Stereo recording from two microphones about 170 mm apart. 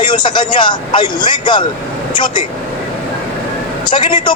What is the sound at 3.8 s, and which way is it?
Speech, 25° left (ahead or behind).